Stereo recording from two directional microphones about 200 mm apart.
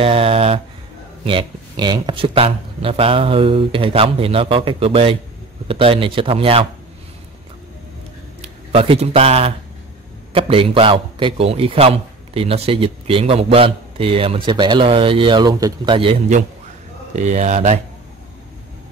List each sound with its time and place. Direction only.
0.0 s a man's voice: 30° right (ahead or behind)
8.4 s a man's voice: 30° right (ahead or behind)